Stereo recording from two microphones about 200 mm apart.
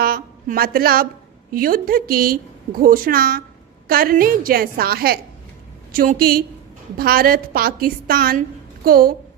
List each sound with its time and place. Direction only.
0.0 s a woman's voice: 50° right (ahead or behind)